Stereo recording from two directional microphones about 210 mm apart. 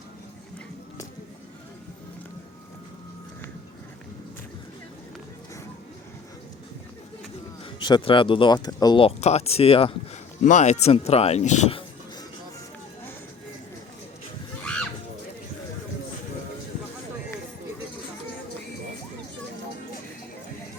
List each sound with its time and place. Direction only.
7.8 s speech: 20° left (ahead or behind)